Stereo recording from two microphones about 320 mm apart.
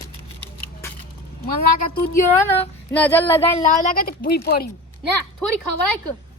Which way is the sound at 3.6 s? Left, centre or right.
Left.